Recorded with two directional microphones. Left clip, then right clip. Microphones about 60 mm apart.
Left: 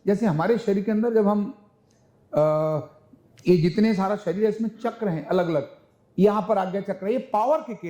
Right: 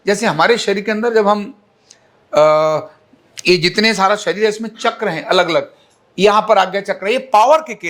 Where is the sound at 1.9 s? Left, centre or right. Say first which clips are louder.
Right 10 dB; right.